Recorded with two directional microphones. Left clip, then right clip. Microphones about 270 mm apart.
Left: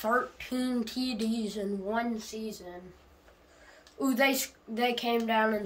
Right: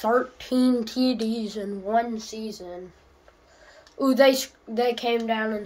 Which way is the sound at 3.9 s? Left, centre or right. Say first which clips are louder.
Right 9 dB; right.